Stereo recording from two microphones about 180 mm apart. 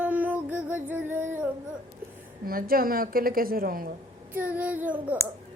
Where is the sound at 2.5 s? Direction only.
55° right (ahead or behind).